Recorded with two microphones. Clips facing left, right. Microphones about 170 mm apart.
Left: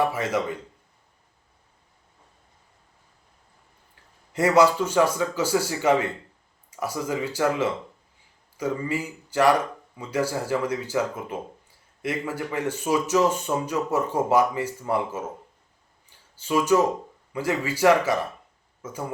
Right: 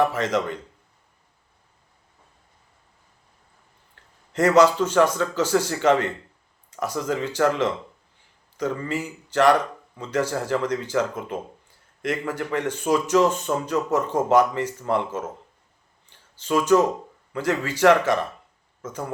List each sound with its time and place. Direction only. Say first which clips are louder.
0.0 s speech: right 2 dB; 10° left (ahead or behind)
4.3 s speech: right 2 dB; 10° left (ahead or behind)
16.0 s a sound: right 3 dB; 10° left (ahead or behind)
17.3 s speech: right 1 dB; 10° left (ahead or behind)